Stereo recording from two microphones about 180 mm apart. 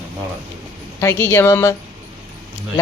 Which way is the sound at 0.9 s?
15° left (ahead or behind).